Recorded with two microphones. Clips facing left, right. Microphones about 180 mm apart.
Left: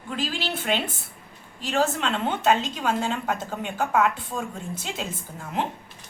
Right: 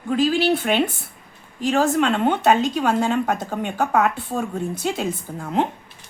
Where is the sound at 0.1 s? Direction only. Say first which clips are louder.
Right 11 dB; 50° right (ahead or behind).